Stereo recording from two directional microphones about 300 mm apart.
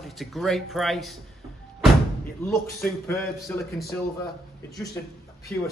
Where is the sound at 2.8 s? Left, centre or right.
Centre.